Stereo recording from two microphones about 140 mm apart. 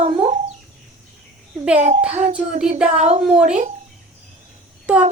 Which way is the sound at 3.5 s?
60° right (ahead or behind).